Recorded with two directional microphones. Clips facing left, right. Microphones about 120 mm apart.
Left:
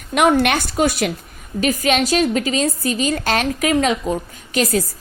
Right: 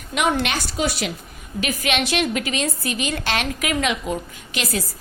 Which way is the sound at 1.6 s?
40° left (ahead or behind).